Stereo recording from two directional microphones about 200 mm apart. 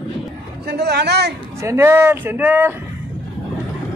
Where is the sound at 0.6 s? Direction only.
55° right (ahead or behind).